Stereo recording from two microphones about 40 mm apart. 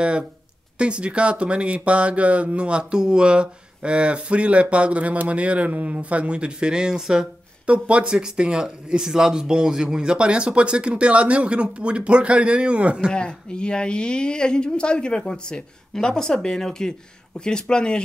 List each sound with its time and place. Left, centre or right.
0.7 s speech: right
7.6 s speech: right
13.1 s speech: left
15.9 s speech: centre